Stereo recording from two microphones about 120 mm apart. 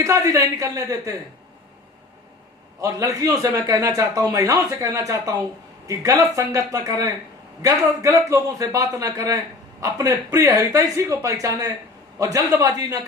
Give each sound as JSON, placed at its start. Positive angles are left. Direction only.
{"t": 0.0, "sound": "a man's voice", "side_deg": -25}
{"t": 2.8, "sound": "a man's voice", "side_deg": -25}